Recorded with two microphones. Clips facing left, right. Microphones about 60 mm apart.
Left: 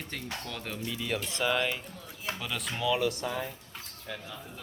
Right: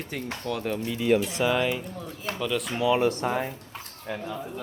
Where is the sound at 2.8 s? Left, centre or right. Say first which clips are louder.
Right 6 dB; right.